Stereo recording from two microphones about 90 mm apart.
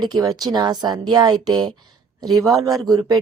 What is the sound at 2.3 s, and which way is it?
Speech, centre (ahead or behind).